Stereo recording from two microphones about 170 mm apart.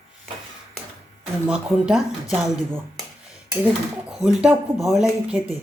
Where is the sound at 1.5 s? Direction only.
5° right (ahead or behind).